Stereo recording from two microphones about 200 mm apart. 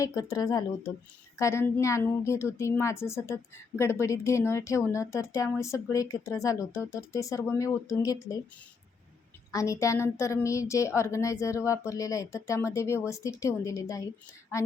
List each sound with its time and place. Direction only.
0.0 s speech: 15° left (ahead or behind)
9.5 s speech: 15° left (ahead or behind)